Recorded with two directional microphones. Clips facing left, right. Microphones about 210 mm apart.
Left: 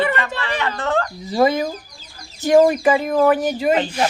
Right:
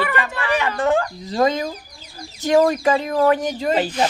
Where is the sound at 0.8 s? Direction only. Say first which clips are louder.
Right 3 dB; 10° right (ahead or behind).